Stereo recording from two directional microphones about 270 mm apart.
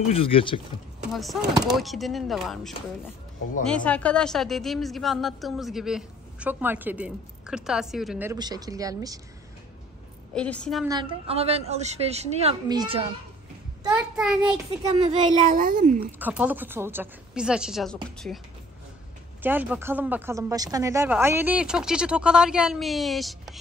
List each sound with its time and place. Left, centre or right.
0.1 s speech: centre
1.1 s a woman's voice: centre
10.3 s a woman's voice: centre
10.9 s a woman's voice: centre
13.9 s a woman's voice: centre
15.0 s a woman's voice: right
16.2 s a woman's voice: centre
19.4 s a woman's voice: centre